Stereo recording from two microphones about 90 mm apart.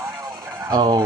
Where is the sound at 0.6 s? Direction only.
50° right (ahead or behind).